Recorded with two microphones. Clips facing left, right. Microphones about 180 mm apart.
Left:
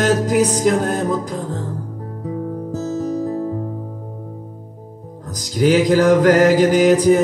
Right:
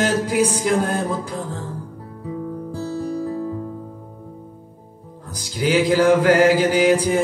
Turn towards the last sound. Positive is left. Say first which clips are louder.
# left 4 dB
turn(degrees=40)  # may be behind; listen again after turning